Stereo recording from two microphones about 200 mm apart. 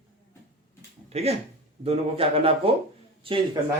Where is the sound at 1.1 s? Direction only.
30° right (ahead or behind).